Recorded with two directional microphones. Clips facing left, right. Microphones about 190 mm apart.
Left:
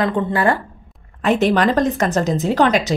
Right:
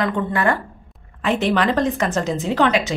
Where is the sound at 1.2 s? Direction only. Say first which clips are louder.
Left 3 dB; 45° left (ahead or behind).